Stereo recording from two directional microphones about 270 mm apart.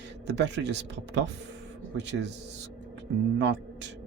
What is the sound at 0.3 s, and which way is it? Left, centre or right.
Speech, right.